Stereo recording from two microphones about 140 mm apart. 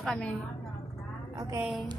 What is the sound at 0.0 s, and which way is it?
Speech, 5° left (ahead or behind).